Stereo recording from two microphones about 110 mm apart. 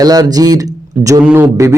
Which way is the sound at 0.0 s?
35° right (ahead or behind).